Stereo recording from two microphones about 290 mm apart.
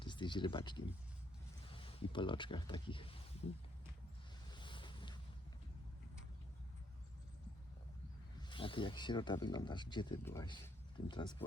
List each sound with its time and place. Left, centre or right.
0.0 s speech: centre
4.5 s boat: centre
8.4 s speech: centre